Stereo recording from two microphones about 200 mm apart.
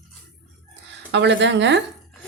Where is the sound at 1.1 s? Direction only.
60° right (ahead or behind).